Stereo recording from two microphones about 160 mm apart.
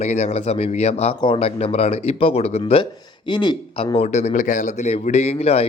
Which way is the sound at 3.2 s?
30° left (ahead or behind).